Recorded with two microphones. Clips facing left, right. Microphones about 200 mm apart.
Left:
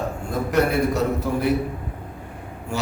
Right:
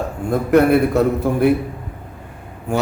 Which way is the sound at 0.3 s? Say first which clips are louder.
Right 8 dB; 55° right (ahead or behind).